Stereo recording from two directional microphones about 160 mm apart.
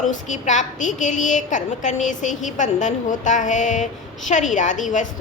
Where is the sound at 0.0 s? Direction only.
50° left (ahead or behind).